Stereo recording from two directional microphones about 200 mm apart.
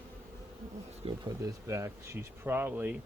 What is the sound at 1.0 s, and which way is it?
Speech, 30° right (ahead or behind).